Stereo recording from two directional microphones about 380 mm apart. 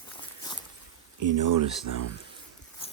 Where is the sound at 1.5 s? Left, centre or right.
Right.